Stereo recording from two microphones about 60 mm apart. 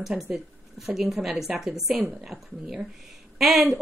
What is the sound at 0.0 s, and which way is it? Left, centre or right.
A woman's voice, centre.